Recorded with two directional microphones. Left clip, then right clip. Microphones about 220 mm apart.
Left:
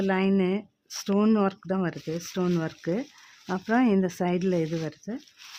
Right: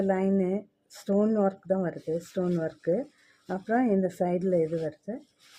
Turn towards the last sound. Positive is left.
turn(degrees=45)  # may be behind; listen again after turning